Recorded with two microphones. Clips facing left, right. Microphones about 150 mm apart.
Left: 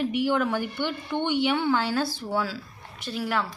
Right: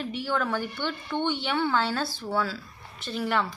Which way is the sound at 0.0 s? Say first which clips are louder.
Left 5 dB; 15° left (ahead or behind).